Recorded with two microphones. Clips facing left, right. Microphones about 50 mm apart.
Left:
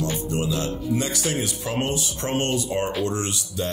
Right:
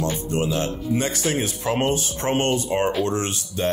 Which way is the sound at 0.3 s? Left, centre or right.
Right.